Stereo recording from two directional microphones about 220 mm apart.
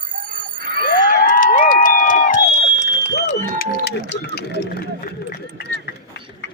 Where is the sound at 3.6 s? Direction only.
45° left (ahead or behind).